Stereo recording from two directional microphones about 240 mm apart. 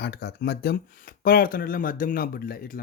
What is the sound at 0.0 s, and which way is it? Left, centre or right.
Speech, left.